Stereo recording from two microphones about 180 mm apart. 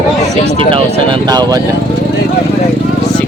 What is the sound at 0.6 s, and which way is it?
Speech, 30° right (ahead or behind).